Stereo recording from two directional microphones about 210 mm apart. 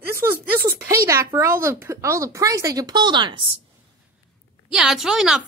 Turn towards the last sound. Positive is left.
turn(degrees=0)  # may be behind; listen again after turning